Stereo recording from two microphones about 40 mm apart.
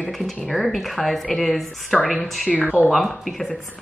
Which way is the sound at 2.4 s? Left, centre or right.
Left.